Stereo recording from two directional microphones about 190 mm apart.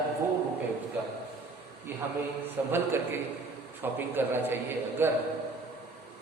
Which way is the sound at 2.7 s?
10° right (ahead or behind).